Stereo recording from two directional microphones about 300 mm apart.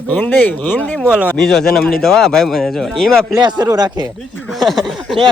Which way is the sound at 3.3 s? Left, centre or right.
Centre.